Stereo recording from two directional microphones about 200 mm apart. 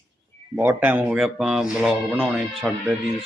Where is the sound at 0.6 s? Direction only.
10° right (ahead or behind).